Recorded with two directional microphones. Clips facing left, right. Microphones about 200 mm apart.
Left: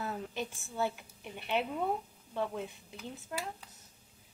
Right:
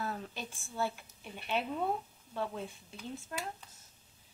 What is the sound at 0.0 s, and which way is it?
A woman's voice, 20° left (ahead or behind).